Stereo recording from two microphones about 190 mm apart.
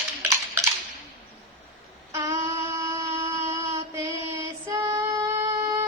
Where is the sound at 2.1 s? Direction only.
15° right (ahead or behind).